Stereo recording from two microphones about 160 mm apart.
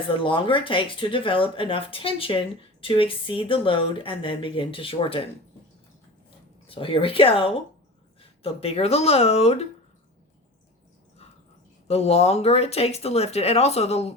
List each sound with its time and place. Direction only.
0.1 s speech: 35° left (ahead or behind)
6.7 s speech: 35° left (ahead or behind)
11.9 s speech: 40° left (ahead or behind)